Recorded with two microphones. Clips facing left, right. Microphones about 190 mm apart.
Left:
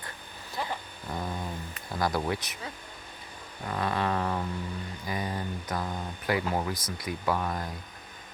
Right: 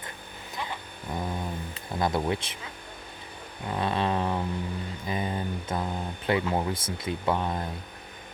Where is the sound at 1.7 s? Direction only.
25° right (ahead or behind).